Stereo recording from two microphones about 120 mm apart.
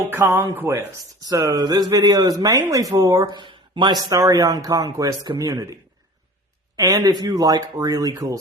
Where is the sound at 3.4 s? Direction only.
40° right (ahead or behind).